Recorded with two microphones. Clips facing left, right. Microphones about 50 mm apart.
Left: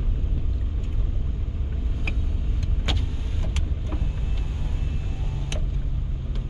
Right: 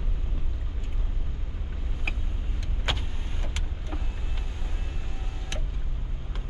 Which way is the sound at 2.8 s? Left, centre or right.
Right.